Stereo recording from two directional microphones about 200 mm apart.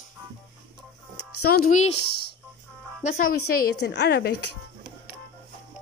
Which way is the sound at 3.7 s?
60° left (ahead or behind).